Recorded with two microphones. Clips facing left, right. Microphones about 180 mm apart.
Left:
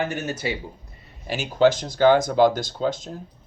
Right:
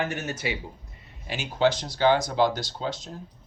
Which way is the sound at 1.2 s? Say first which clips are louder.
Left 5 dB; 45° left (ahead or behind).